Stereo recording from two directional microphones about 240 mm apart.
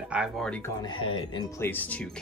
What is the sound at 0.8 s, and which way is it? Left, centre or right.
Speech, left.